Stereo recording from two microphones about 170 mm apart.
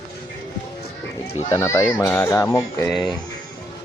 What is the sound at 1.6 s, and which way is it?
Speech, 15° left (ahead or behind).